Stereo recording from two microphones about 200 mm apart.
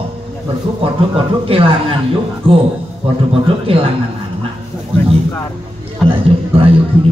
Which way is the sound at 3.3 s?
30° right (ahead or behind).